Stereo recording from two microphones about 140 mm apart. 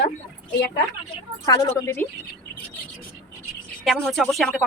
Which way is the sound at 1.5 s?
25° left (ahead or behind).